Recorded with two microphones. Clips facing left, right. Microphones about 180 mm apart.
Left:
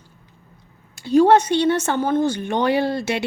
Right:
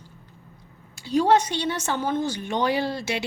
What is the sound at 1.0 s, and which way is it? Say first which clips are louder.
Speech: left 6 dB; 50° left (ahead or behind).